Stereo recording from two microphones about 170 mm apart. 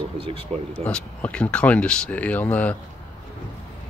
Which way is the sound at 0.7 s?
5° left (ahead or behind).